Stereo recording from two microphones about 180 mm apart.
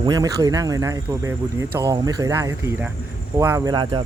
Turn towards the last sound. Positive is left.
turn(degrees=-25)  # may be behind; listen again after turning